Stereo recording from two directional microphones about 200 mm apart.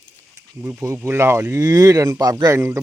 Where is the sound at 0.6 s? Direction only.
10° right (ahead or behind).